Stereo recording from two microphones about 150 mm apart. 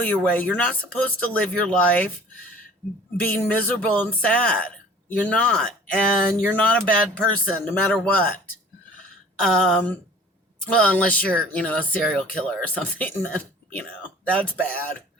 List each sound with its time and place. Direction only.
0.1 s speech: 10° left (ahead or behind)
3.2 s speech: 10° left (ahead or behind)
9.4 s speech: 5° left (ahead or behind)